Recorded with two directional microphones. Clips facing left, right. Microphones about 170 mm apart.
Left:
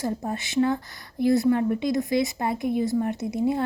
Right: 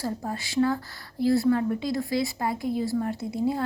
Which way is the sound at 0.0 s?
20° left (ahead or behind).